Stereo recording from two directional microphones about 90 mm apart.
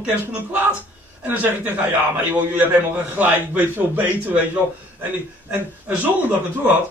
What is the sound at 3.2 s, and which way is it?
A man's voice, 20° right (ahead or behind).